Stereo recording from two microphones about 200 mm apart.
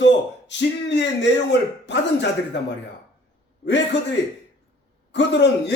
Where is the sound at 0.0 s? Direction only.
60° left (ahead or behind).